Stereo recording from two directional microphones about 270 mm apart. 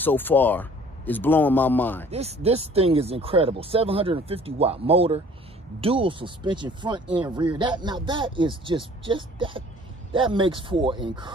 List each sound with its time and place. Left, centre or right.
0.0 s a man's voice: centre
2.0 s speech: right